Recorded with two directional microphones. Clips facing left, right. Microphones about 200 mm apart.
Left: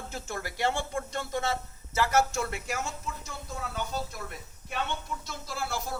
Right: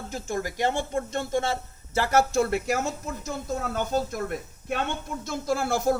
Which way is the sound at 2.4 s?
50° right (ahead or behind).